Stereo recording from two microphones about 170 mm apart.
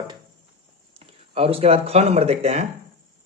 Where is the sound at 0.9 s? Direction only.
35° right (ahead or behind).